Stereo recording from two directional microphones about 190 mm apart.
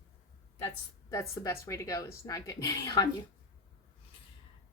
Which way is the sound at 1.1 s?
15° left (ahead or behind).